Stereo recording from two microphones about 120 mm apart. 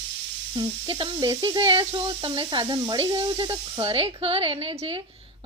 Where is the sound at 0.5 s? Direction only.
40° right (ahead or behind).